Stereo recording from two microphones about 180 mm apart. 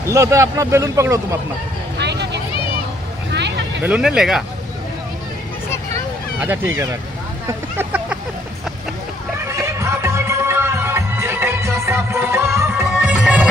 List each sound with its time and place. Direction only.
0.1 s speech: 15° right (ahead or behind)
2.0 s vehicle: 70° right (ahead or behind)
3.8 s speech: 5° right (ahead or behind)
6.4 s speech: 10° right (ahead or behind)
7.4 s vehicle: 10° right (ahead or behind)
9.5 s music: 15° right (ahead or behind)